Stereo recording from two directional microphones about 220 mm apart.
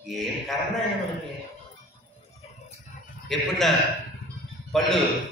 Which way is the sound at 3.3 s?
Centre (ahead or behind).